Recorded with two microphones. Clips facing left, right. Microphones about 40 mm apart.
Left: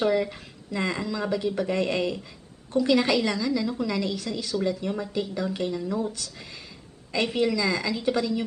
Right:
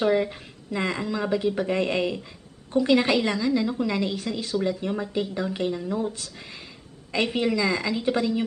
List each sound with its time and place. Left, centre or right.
0.1 s a woman's voice: right
7.3 s a woman's voice: right